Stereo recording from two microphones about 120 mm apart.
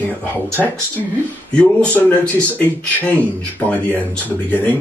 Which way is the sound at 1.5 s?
10° left (ahead or behind).